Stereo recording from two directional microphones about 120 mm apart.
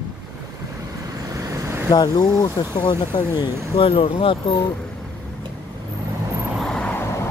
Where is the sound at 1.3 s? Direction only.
25° right (ahead or behind).